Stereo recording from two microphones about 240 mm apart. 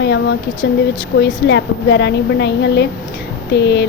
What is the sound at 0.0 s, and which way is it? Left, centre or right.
Speech, left.